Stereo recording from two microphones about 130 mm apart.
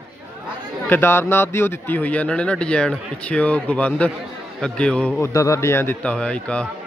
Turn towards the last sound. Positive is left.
turn(degrees=10)  # may be behind; listen again after turning